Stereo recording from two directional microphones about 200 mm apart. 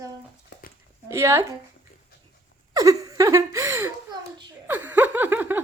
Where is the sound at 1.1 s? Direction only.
15° right (ahead or behind).